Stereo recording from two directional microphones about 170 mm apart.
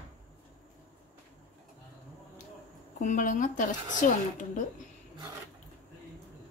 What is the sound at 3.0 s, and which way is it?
A woman's voice, 50° left (ahead or behind).